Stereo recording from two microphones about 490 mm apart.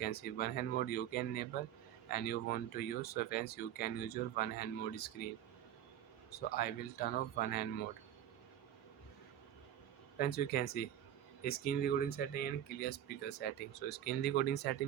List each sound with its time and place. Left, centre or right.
0.0 s speech: centre
6.5 s speech: centre
10.2 s speech: centre